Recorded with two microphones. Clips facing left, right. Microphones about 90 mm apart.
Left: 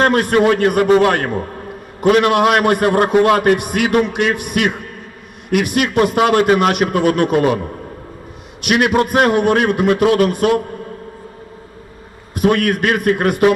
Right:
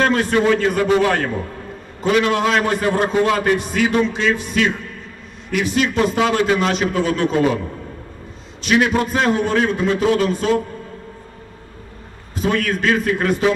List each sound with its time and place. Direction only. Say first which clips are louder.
0.0 s a man's voice: left 3 dB; 55° left (ahead or behind)
1.4 s a sound: left 3 dB; 40° left (ahead or behind)
2.0 s a man's voice: left 5 dB; 55° left (ahead or behind)
12.4 s a man's voice: left 5 dB; 60° left (ahead or behind)